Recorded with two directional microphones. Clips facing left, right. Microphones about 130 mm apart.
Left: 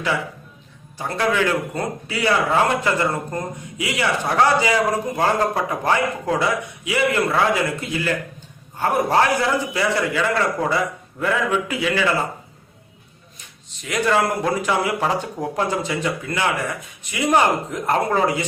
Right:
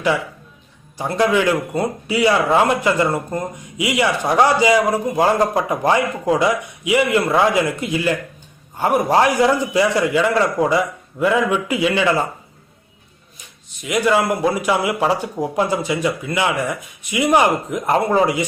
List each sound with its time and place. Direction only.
0.9 s a man's voice: 15° right (ahead or behind)
13.8 s a man's voice: 10° right (ahead or behind)